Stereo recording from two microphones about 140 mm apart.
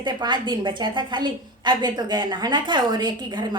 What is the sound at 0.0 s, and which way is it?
A woman's voice, 35° right (ahead or behind).